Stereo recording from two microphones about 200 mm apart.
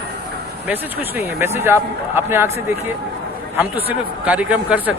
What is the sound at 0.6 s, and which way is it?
Speech, 10° right (ahead or behind).